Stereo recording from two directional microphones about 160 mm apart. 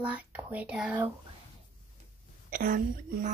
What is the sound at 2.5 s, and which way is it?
Speech, 65° right (ahead or behind).